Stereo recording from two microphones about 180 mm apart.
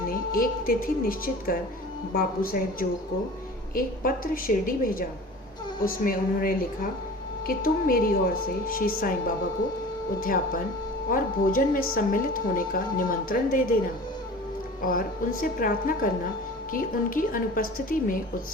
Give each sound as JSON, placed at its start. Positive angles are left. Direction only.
{"t": 0.1, "sound": "a woman's voice", "side_deg": 50}
{"t": 10.2, "sound": "a woman's voice", "side_deg": 50}
{"t": 14.8, "sound": "a woman's voice", "side_deg": 50}